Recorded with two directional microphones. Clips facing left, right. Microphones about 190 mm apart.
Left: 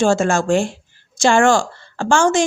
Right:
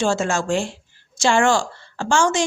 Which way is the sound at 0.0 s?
50° left (ahead or behind).